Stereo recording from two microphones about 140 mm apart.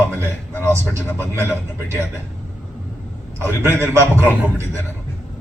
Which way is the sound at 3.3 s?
20° right (ahead or behind).